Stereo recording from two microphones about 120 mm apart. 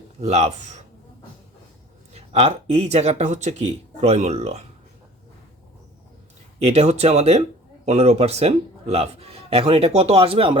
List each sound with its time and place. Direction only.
0.2 s a man's voice: 60° right (ahead or behind)
2.1 s a man's voice: 60° right (ahead or behind)
6.6 s a man's voice: 60° right (ahead or behind)